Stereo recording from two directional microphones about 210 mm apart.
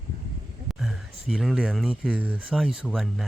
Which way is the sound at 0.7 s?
Centre (ahead or behind).